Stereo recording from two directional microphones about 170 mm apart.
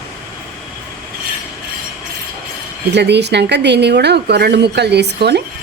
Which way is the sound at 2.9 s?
85° right.